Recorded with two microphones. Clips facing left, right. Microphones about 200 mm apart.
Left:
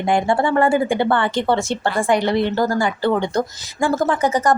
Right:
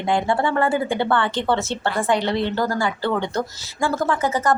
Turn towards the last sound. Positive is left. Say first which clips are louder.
# left 3 dB
turn(degrees=15)  # may be behind; listen again after turning